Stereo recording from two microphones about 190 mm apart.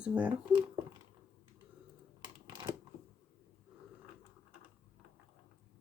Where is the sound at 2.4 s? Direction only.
25° right (ahead or behind).